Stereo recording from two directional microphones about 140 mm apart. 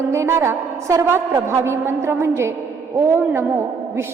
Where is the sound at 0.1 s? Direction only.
20° right (ahead or behind).